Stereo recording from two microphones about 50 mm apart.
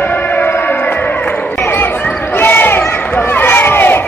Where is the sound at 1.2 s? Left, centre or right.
Left.